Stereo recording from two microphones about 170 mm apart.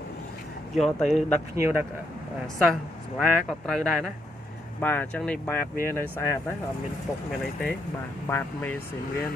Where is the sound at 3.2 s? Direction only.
Centre (ahead or behind).